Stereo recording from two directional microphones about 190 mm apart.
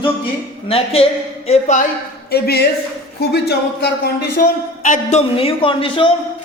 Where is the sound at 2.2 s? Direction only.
55° left (ahead or behind).